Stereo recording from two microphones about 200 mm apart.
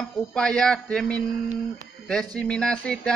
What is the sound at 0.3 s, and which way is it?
Speech, 5° left (ahead or behind).